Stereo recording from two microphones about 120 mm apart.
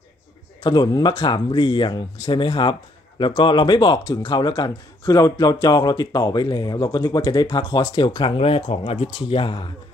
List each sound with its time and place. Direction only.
0.7 s speech: 40° left (ahead or behind)